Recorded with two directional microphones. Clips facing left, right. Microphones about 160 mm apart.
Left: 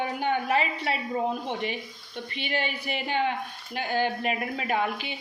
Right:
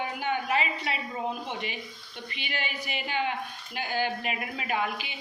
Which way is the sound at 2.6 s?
55° left (ahead or behind).